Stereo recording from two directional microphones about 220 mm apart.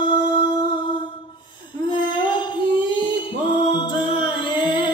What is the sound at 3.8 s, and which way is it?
Music, 20° left (ahead or behind).